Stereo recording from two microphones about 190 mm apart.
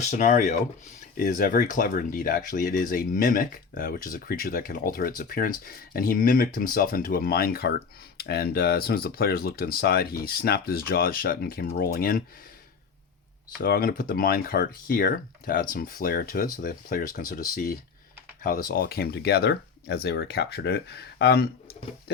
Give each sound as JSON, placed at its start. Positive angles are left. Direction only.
{"t": 0.0, "sound": "speech", "side_deg": 40}
{"t": 13.6, "sound": "speech", "side_deg": 50}